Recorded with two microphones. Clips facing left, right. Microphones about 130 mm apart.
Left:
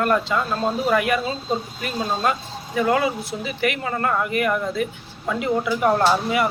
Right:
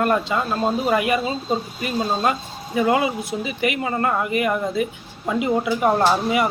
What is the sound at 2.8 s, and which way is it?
Speech, 10° right (ahead or behind).